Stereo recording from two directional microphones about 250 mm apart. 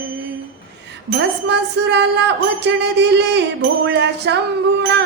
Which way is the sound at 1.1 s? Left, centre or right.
Right.